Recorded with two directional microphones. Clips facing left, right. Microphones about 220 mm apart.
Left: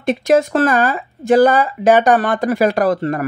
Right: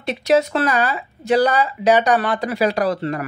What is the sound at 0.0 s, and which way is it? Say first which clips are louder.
Speech: left 3 dB; 50° left (ahead or behind).